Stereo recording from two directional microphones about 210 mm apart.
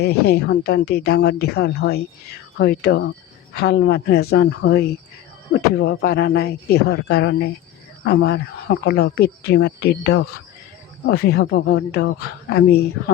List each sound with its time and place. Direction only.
0.0 s speech: 50° left (ahead or behind)